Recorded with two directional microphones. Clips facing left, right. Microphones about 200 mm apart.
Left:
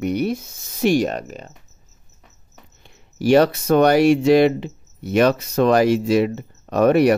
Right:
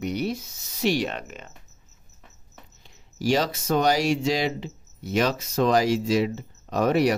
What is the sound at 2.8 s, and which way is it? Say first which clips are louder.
Speech: left 7 dB; 60° left (ahead or behind).